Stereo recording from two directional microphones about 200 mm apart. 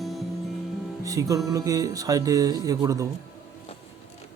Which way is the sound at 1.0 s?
15° right (ahead or behind).